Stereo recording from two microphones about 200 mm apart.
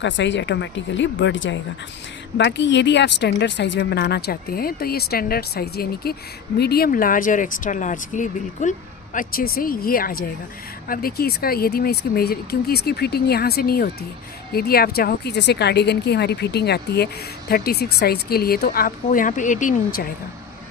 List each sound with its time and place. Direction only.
0.0 s speech: 60° left (ahead or behind); by 20.1 s 45° left (ahead or behind)